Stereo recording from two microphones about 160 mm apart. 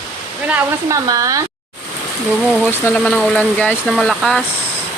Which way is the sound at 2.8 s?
10° left (ahead or behind).